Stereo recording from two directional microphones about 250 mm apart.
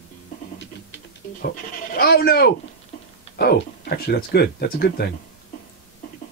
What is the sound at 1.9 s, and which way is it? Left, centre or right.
Speech, left.